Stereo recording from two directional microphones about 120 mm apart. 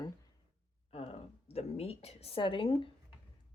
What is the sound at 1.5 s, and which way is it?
Speech, 55° left (ahead or behind).